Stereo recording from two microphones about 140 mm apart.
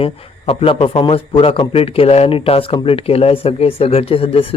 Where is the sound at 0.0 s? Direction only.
40° left (ahead or behind).